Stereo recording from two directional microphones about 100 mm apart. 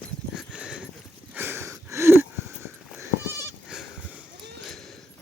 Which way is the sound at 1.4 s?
20° right (ahead or behind).